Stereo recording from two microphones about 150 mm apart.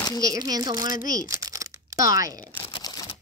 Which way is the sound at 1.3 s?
20° right (ahead or behind).